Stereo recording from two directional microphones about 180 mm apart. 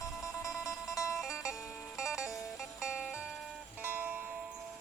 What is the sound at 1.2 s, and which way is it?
Music, centre (ahead or behind).